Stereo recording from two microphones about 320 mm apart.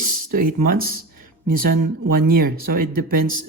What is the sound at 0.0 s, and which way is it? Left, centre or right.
Speech, right.